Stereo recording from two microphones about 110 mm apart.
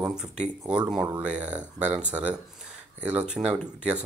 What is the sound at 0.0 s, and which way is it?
Speech, 5° right (ahead or behind).